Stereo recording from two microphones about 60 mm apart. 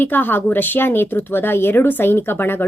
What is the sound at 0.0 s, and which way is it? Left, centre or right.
Speech, left.